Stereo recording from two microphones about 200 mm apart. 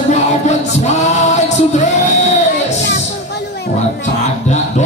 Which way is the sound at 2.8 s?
55° left (ahead or behind).